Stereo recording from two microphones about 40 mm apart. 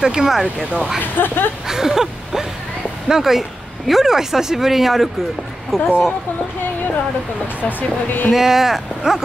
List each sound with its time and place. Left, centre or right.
0.0 s speech: centre
1.1 s a sound: left
1.7 s speech: centre
7.6 s speech: left
8.3 s speech: centre